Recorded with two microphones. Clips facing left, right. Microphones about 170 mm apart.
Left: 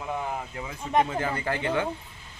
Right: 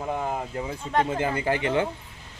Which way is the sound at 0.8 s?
15° left (ahead or behind).